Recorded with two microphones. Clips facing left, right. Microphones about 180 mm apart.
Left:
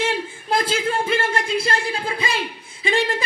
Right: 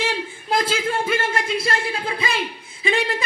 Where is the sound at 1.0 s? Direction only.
30° left (ahead or behind).